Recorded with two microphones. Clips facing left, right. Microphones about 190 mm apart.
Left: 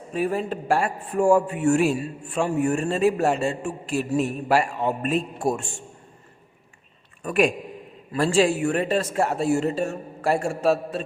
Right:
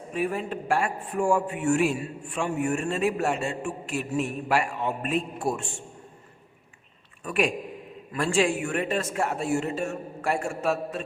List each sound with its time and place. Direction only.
0.1 s a man's voice: 35° left (ahead or behind)
7.3 s a man's voice: 45° left (ahead or behind)
8.1 s a man's voice: 35° left (ahead or behind)